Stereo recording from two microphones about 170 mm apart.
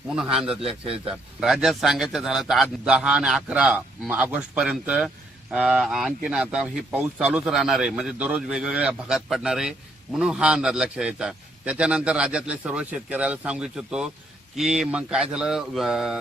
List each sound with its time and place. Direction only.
0.1 s a man's voice: 5° right (ahead or behind)
0.6 s a man's voice: 35° right (ahead or behind)
1.4 s a man's voice: 5° right (ahead or behind)